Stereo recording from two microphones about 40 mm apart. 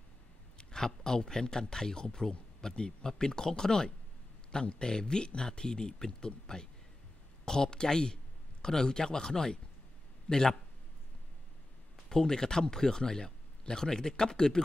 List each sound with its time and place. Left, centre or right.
0.6 s speech: centre
10.3 s a man's voice: left
12.1 s speech: centre